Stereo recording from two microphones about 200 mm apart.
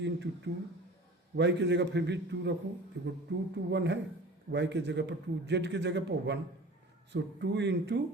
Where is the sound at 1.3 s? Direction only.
60° right (ahead or behind).